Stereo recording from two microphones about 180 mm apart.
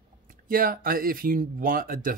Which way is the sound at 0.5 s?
55° right (ahead or behind).